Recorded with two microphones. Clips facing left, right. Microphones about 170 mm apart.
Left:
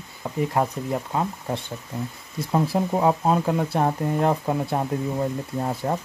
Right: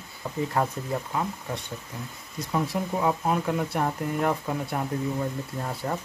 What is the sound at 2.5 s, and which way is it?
Speech, 35° left (ahead or behind).